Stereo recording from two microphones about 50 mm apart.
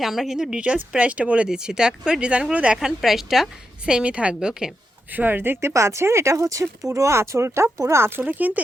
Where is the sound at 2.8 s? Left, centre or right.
Centre.